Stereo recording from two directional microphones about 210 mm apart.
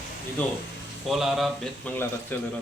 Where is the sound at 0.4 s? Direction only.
5° left (ahead or behind).